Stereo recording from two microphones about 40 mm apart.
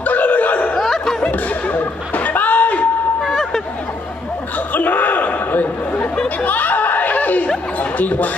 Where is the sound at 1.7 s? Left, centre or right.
Left.